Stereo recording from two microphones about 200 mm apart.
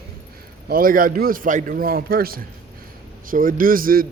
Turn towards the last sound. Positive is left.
turn(degrees=-45)  # may be behind; listen again after turning